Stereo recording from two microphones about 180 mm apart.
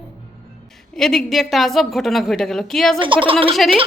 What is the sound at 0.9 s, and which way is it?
Speech, centre (ahead or behind).